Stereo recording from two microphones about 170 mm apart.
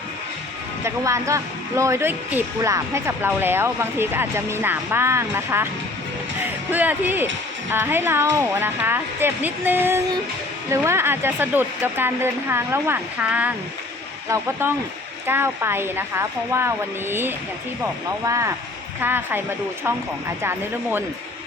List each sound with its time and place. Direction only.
0.9 s a woman's voice: 15° right (ahead or behind)
6.7 s a woman's voice: 10° right (ahead or behind)